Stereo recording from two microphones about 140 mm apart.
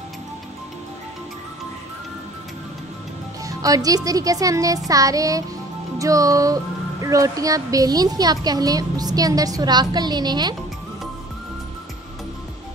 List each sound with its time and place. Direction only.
3.4 s speech: 25° right (ahead or behind)